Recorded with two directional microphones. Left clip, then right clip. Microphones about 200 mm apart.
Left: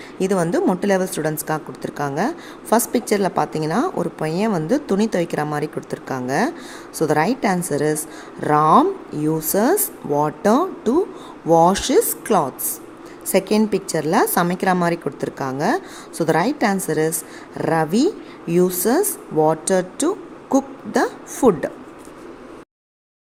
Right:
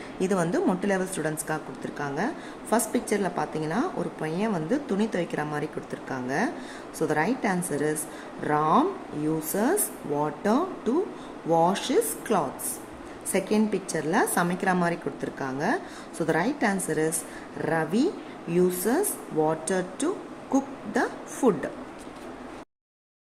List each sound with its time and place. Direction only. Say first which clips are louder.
0.2 s a woman's voice: left 7 dB; 30° left (ahead or behind)